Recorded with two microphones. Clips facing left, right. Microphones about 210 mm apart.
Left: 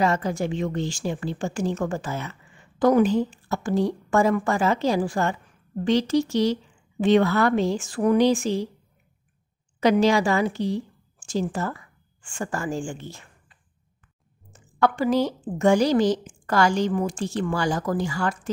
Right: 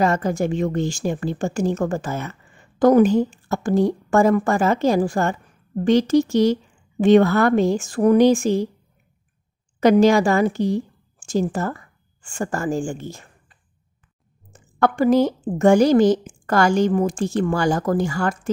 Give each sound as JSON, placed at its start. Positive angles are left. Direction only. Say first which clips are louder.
{"t": 0.0, "sound": "speech", "louder": "right 3 dB", "side_deg": -45}
{"t": 9.8, "sound": "a woman's voice", "louder": "right 5 dB", "side_deg": -50}
{"t": 14.5, "sound": "speech", "louder": "right 2 dB", "side_deg": -50}